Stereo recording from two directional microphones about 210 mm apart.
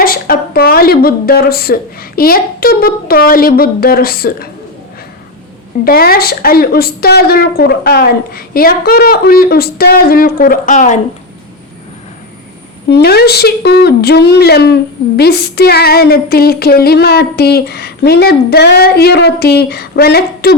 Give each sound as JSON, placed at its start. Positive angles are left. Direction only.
{"t": 0.0, "sound": "a woman's voice", "side_deg": 45}
{"t": 5.8, "sound": "speech", "side_deg": 45}
{"t": 12.9, "sound": "speech", "side_deg": 50}